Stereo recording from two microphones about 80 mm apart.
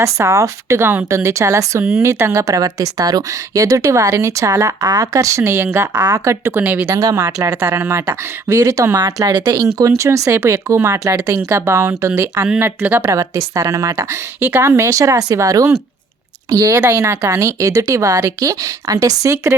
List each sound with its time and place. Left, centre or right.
0.0 s a woman's voice: right
6.0 s a woman's voice: right
6.6 s speech: centre
6.8 s speech: right
7.6 s a woman's voice: right
10.1 s speech: right
13.1 s a woman's voice: right
14.4 s a woman's voice: right
16.8 s speech: right